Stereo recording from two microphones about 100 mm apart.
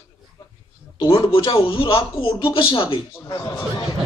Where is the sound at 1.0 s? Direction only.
65° left (ahead or behind).